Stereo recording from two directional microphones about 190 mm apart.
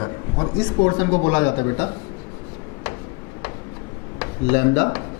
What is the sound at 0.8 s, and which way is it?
Speech, 20° left (ahead or behind).